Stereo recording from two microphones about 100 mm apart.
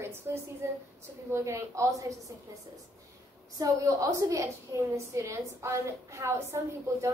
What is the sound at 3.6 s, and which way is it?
A woman's voice, 35° right (ahead or behind).